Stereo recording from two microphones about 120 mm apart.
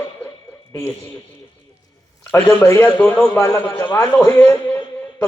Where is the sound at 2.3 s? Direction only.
20° left (ahead or behind).